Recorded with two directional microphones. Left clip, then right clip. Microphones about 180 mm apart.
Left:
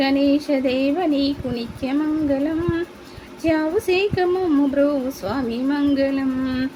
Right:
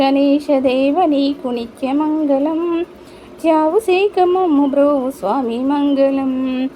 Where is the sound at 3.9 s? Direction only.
10° right (ahead or behind).